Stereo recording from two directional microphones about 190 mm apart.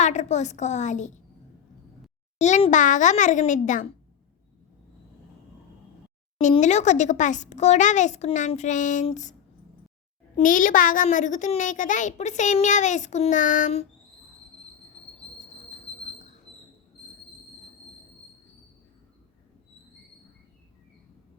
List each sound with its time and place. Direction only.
0.0 s a child's voice: 40° left (ahead or behind)
2.4 s a child's voice: 40° left (ahead or behind)
6.5 s a child's voice: 35° left (ahead or behind)
10.3 s a child's voice: 45° left (ahead or behind)